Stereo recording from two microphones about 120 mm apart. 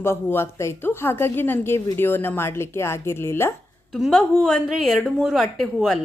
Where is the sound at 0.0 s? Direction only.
20° left (ahead or behind).